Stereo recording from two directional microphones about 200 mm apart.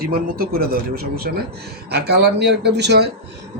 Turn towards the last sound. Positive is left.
turn(degrees=-55)  # may be behind; listen again after turning